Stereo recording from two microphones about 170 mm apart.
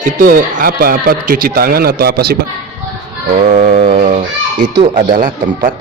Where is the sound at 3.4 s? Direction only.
45° right (ahead or behind).